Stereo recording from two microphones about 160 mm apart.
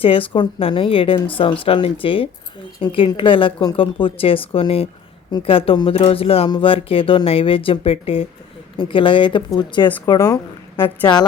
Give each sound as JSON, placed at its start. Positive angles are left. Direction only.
{"t": 0.0, "sound": "speech", "side_deg": 35}